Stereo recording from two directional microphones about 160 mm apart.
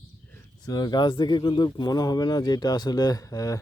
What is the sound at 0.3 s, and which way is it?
A man's voice, 20° left (ahead or behind).